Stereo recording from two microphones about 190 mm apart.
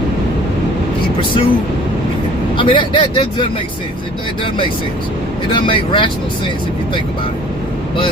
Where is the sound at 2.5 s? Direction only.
25° left (ahead or behind).